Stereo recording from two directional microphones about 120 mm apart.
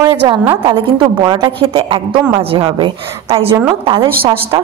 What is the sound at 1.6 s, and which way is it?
A woman's voice, 50° right (ahead or behind).